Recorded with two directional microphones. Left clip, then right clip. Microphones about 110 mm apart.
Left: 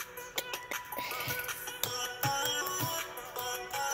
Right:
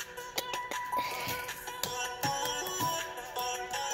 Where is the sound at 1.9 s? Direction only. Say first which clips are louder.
Even; 30° left (ahead or behind).